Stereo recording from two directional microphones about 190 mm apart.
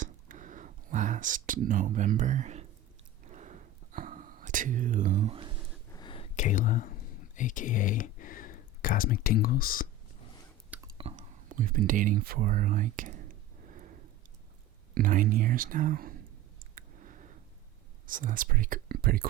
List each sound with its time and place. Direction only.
0.0 s a sound: 40° right (ahead or behind)
3.2 s whispering: 40° right (ahead or behind)
5.9 s a sound: 25° left (ahead or behind)
6.3 s speech: 40° left (ahead or behind)
10.7 s a sound: 10° right (ahead or behind)
11.4 s speech: 45° right (ahead or behind)
14.9 s speech: 45° right (ahead or behind)
16.6 s clicking: 45° right (ahead or behind)
18.0 s speech: 45° right (ahead or behind)